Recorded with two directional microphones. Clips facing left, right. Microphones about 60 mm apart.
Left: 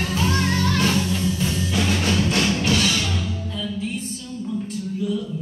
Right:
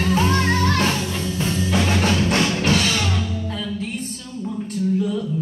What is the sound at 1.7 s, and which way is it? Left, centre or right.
Music, right.